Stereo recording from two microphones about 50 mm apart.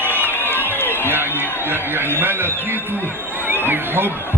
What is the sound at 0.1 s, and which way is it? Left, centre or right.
Crowd, left.